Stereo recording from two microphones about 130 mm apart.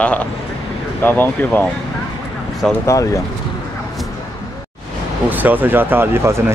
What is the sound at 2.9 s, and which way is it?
Speech, 25° left (ahead or behind).